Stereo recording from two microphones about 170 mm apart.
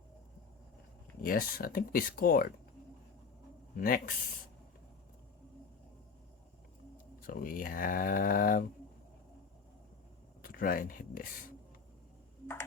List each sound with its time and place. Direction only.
1.2 s speech: 55° left (ahead or behind)
3.8 s speech: 55° left (ahead or behind)
7.2 s speech: 55° left (ahead or behind)
10.4 s speech: 55° left (ahead or behind)